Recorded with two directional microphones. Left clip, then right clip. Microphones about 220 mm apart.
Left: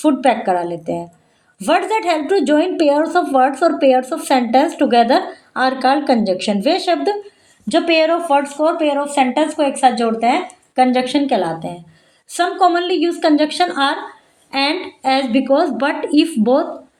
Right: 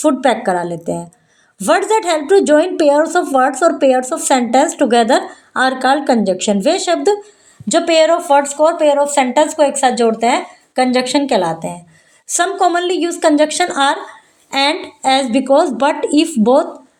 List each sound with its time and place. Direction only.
0.0 s a woman's voice: 30° right (ahead or behind)